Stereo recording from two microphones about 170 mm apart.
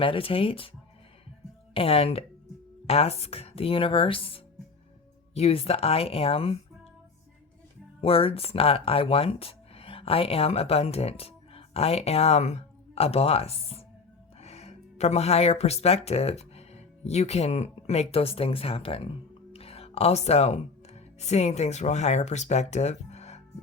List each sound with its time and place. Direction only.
0.0 s speech: 30° left (ahead or behind)
1.7 s speech: 35° left (ahead or behind)
8.0 s speech: 35° left (ahead or behind)